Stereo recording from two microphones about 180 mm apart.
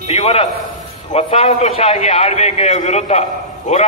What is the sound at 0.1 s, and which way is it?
A man's voice, 35° left (ahead or behind).